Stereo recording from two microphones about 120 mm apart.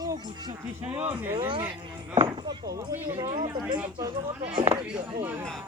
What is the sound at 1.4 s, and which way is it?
Speech, 45° right (ahead or behind).